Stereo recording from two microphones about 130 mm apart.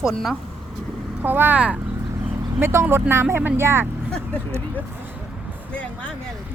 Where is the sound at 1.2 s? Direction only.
15° right (ahead or behind).